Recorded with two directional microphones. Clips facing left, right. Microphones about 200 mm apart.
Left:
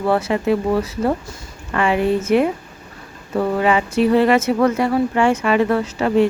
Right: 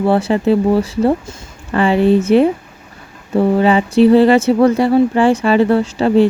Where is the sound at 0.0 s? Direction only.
30° right (ahead or behind).